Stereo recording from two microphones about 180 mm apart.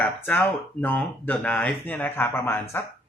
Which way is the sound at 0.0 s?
10° left (ahead or behind).